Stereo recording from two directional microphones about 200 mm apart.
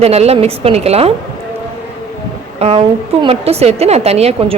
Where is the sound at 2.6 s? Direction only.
30° right (ahead or behind).